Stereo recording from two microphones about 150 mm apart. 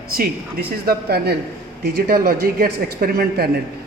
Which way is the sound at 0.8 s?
90° right.